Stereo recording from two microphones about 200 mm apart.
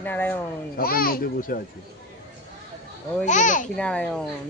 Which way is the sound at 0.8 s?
45° left (ahead or behind).